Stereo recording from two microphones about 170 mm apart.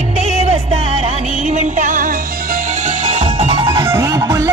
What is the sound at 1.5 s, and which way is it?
Music, 45° right (ahead or behind).